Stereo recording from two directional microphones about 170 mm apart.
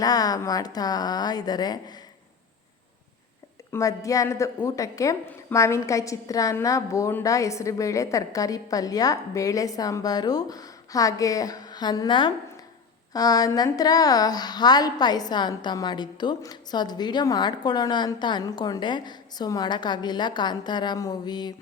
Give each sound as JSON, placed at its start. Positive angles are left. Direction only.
{"t": 0.0, "sound": "a woman's voice", "side_deg": 20}
{"t": 3.7, "sound": "a woman's voice", "side_deg": 20}